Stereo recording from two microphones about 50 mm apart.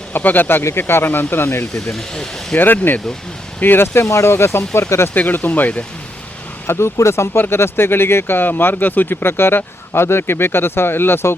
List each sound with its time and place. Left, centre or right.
0.1 s speech: left
1.7 s speech: centre
2.6 s speech: left
4.1 s speech: left
5.1 s speech: left
6.7 s speech: left
7.3 s speech: left
9.2 s speech: left